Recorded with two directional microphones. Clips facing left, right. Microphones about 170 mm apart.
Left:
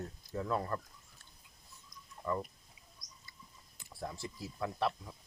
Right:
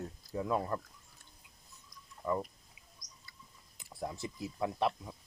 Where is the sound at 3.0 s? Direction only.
90° right.